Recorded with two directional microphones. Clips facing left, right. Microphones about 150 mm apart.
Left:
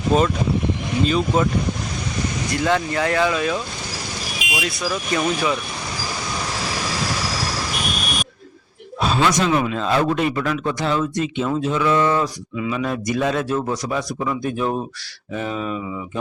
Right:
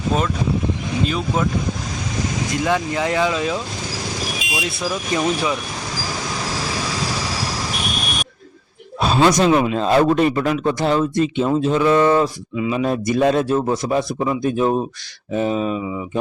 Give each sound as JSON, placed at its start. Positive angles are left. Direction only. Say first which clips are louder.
{"t": 1.0, "sound": "speech", "louder": "left 3 dB", "side_deg": -5}
{"t": 2.5, "sound": "a man's voice", "louder": "left 1 dB", "side_deg": -15}
{"t": 4.6, "sound": "a man's voice", "louder": "even", "side_deg": -20}
{"t": 9.0, "sound": "a man's voice", "louder": "right 4 dB", "side_deg": -35}